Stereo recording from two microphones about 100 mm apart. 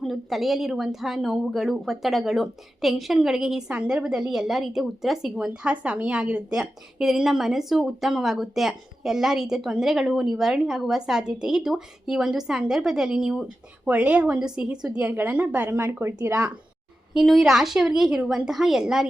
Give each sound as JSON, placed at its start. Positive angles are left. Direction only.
{"t": 0.0, "sound": "a woman's voice", "side_deg": 0}
{"t": 15.1, "sound": "speech", "side_deg": -20}
{"t": 17.2, "sound": "speech", "side_deg": 0}